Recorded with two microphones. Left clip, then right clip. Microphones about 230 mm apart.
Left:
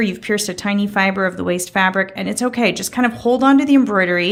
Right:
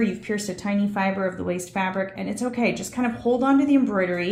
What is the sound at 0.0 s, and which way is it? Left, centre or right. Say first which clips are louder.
Speech: left 7 dB; left.